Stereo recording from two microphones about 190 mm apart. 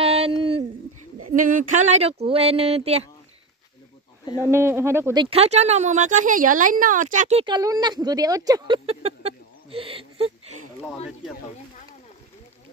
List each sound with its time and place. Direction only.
0.0 s a sound: 30° right (ahead or behind)
1.3 s speech: 45° right (ahead or behind)
4.5 s speech: 15° right (ahead or behind)
5.2 s speech: 30° right (ahead or behind)
7.4 s speech: 20° right (ahead or behind)